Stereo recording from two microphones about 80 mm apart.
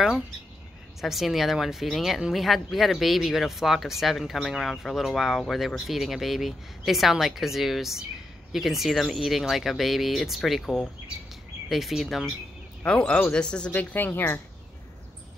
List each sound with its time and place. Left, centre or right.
1.0 s speech: centre
12.8 s speech: centre
13.7 s speech: left